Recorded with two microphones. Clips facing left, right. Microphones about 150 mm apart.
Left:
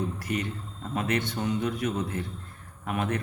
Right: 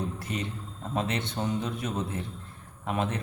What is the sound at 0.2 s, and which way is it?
Speech, 30° right (ahead or behind).